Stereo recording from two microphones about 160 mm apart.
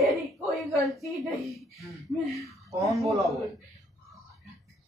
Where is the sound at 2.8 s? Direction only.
Centre (ahead or behind).